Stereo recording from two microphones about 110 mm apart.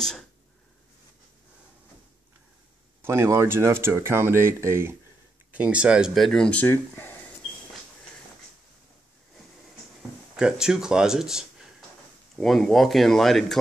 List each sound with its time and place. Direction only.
0.0 s speech: 5° left (ahead or behind)
3.0 s speech: 25° right (ahead or behind)
5.6 s speech: 10° right (ahead or behind); by 7.2 s 20° left (ahead or behind)
10.3 s speech: 5° right (ahead or behind)